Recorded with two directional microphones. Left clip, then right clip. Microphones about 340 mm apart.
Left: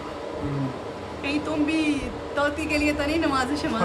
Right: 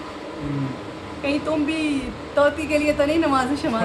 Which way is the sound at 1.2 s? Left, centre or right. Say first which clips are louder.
Right 3 dB; centre.